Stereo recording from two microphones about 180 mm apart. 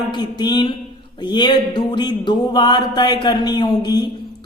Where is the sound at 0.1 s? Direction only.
25° left (ahead or behind).